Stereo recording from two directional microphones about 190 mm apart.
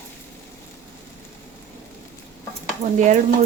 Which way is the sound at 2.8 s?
40° right (ahead or behind).